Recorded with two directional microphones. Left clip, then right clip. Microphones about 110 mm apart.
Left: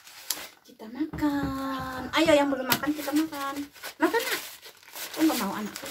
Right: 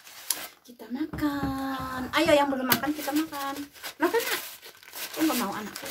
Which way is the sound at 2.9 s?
Centre (ahead or behind).